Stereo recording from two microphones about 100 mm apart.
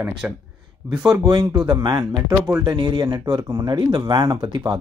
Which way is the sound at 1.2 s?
45° right (ahead or behind).